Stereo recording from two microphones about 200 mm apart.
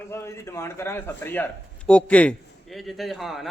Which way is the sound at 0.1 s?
15° left (ahead or behind).